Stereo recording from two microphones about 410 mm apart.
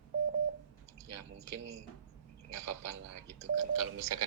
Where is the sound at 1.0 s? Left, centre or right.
Right.